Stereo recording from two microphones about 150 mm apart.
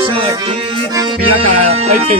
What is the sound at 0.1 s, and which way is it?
Music, 35° right (ahead or behind).